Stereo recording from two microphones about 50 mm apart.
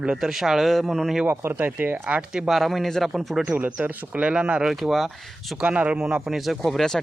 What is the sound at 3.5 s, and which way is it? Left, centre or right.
Speech, right.